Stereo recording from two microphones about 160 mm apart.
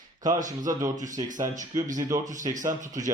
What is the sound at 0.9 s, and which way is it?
Speech, 55° right (ahead or behind).